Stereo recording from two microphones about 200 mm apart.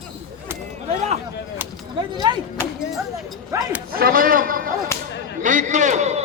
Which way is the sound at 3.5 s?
15° right (ahead or behind).